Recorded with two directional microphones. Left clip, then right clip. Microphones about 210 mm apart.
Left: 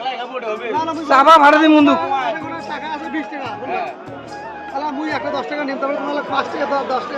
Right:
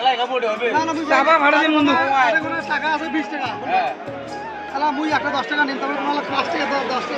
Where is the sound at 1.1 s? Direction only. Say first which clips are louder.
Left 6 dB; 50° left (ahead or behind).